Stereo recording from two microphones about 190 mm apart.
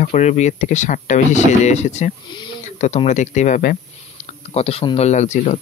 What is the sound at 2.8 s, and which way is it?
Speech, 35° left (ahead or behind).